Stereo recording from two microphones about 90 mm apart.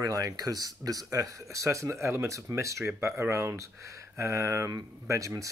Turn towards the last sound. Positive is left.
turn(degrees=-40)  # may be behind; listen again after turning